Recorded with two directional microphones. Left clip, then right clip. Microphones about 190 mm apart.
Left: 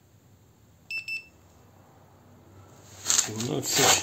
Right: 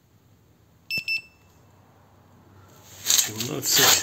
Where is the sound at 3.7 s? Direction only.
20° left (ahead or behind).